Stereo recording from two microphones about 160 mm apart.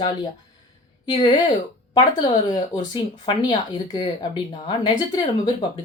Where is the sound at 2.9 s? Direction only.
30° left (ahead or behind).